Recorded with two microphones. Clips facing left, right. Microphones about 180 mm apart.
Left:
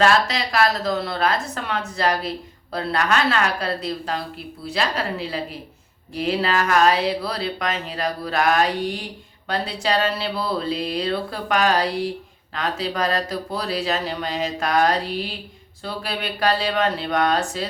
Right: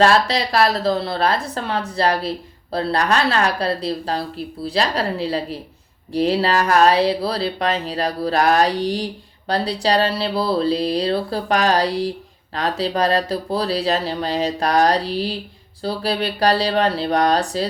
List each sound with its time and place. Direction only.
0.0 s speech: 35° right (ahead or behind)